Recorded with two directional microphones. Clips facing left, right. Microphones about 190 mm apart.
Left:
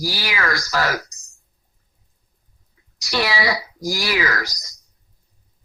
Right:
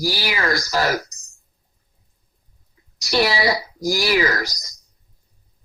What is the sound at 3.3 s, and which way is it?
Speech, 35° right (ahead or behind).